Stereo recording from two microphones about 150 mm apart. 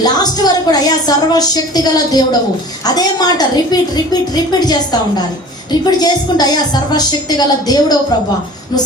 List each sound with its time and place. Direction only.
0.0 s a woman's voice: 25° left (ahead or behind)